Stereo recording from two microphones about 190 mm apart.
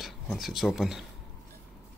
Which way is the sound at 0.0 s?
Centre (ahead or behind).